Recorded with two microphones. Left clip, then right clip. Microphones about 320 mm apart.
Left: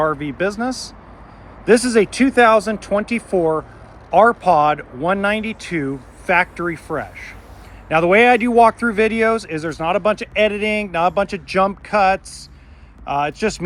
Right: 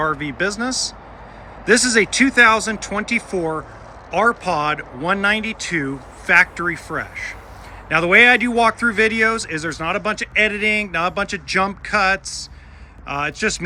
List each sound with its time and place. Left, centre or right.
0.0 s speech: centre